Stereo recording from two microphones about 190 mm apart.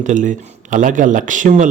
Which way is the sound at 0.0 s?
40° right (ahead or behind).